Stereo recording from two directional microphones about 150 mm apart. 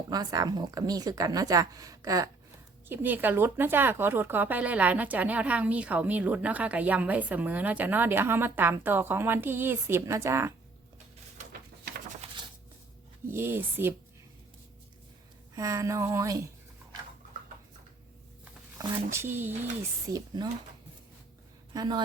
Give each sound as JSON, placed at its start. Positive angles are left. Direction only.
{"t": 0.1, "sound": "a woman's voice", "side_deg": -25}
{"t": 2.9, "sound": "a woman's voice", "side_deg": -10}
{"t": 13.2, "sound": "a woman's voice", "side_deg": -15}
{"t": 15.5, "sound": "a woman's voice", "side_deg": -20}
{"t": 18.8, "sound": "a woman's voice", "side_deg": -15}
{"t": 20.1, "sound": "a woman's voice", "side_deg": -25}
{"t": 21.7, "sound": "speech", "side_deg": -25}